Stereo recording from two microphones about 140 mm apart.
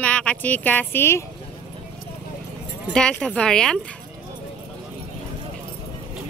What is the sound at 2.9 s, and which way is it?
Speech, 5° left (ahead or behind).